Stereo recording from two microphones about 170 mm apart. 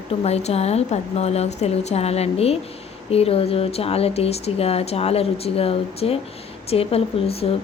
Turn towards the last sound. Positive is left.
turn(degrees=35)  # may be behind; listen again after turning